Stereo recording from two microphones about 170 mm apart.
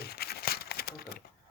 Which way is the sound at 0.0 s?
70° left (ahead or behind).